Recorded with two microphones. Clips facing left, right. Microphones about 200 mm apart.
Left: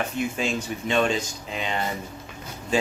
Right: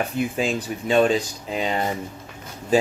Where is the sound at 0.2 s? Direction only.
35° right (ahead or behind).